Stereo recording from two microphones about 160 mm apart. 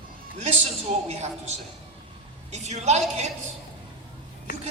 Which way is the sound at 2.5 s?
45° right (ahead or behind).